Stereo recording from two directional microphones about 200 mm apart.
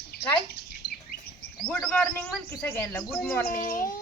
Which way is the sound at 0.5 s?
50° left (ahead or behind).